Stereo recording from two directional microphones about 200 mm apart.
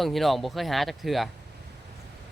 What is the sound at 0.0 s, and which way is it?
Speech, centre (ahead or behind).